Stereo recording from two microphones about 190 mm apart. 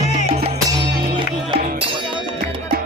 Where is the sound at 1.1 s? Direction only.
25° right (ahead or behind).